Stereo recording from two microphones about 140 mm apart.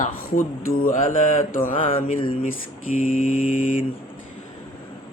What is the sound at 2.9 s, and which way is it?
Mantra, 70° left (ahead or behind).